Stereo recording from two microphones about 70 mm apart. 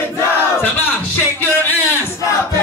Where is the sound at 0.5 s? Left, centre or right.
Left.